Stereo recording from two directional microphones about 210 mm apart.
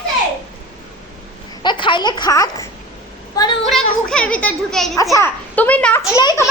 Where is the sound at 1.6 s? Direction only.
20° left (ahead or behind).